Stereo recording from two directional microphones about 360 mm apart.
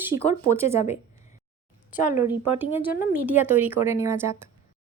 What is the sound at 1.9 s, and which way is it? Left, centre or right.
Speech, left.